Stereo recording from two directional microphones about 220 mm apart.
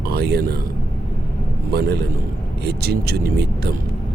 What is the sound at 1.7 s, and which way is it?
Speech, 45° right (ahead or behind).